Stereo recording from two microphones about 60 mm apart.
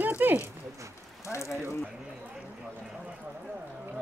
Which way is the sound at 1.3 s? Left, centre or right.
Left.